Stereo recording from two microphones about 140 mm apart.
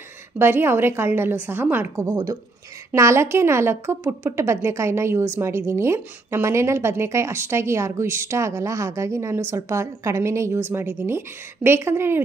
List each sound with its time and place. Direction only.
0.4 s a woman's voice: 15° right (ahead or behind)